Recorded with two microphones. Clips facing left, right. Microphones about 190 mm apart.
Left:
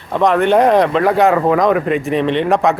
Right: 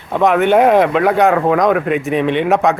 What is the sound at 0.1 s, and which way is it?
Speech, 5° right (ahead or behind).